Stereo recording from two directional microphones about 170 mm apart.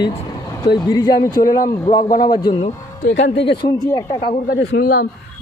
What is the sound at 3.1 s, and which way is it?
Speech, 90° left.